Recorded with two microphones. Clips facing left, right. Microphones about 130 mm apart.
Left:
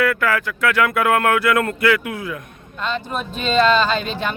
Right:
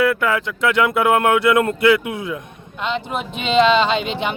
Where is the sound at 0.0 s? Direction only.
20° right (ahead or behind).